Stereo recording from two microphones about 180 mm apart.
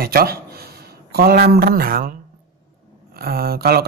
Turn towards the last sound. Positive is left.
turn(degrees=-60)  # may be behind; listen again after turning